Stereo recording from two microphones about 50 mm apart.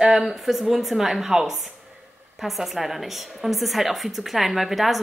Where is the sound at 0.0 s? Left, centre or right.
Centre.